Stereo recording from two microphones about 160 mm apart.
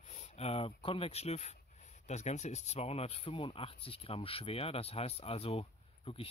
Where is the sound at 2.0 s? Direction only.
45° left (ahead or behind).